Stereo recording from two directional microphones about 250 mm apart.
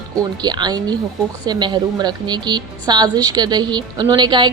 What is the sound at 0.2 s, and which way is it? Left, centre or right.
A woman's voice, centre.